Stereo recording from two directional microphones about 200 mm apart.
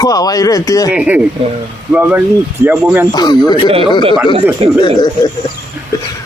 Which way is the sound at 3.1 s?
20° left (ahead or behind).